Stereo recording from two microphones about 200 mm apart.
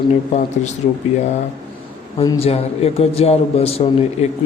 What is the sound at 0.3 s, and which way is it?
Speech, 35° left (ahead or behind).